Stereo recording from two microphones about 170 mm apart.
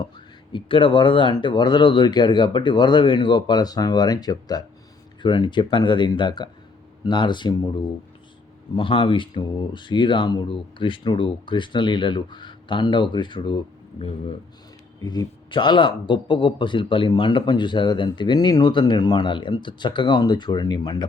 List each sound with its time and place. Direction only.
0.5 s speech: 30° left (ahead or behind)
8.7 s speech: 30° left (ahead or behind)
15.0 s speech: 25° left (ahead or behind)